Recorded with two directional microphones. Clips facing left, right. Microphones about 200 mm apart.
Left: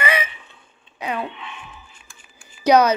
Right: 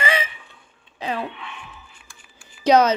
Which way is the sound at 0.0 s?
25° right (ahead or behind).